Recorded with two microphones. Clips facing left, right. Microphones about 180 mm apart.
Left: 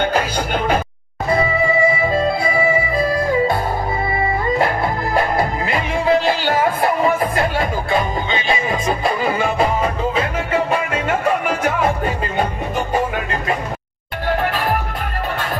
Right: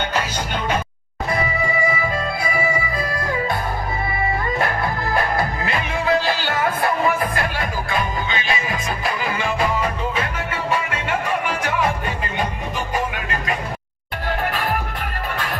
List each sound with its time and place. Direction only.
1.3 s music: 25° left (ahead or behind)
4.6 s music: 25° left (ahead or behind)
12.9 s music: 30° left (ahead or behind)